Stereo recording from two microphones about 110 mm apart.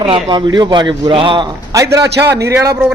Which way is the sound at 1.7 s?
30° right (ahead or behind).